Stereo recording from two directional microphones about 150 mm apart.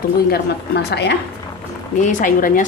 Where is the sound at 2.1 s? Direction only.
60° left (ahead or behind).